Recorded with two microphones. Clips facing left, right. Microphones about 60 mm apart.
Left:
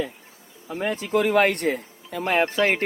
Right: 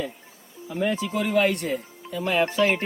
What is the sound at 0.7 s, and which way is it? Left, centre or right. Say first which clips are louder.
Speech: left 1 dB; left.